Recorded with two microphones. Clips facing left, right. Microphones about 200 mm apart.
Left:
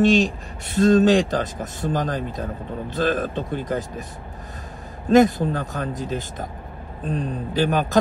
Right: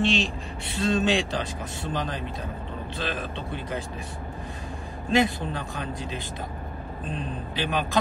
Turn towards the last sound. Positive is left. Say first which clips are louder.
# left 7 dB
turn(degrees=45)  # may be behind; listen again after turning